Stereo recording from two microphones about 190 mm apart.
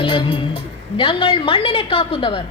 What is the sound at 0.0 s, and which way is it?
A woman's voice, 25° left (ahead or behind).